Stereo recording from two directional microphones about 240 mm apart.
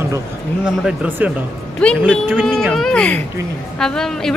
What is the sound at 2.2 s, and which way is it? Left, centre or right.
Speech, centre.